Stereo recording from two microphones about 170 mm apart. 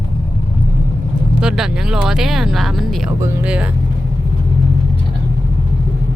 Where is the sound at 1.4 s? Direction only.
5° right (ahead or behind).